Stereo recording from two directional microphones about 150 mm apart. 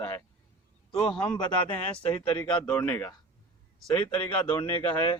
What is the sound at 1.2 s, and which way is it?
Speech, 10° left (ahead or behind).